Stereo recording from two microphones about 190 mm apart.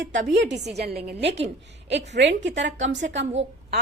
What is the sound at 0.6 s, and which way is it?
A woman's voice, 60° right (ahead or behind).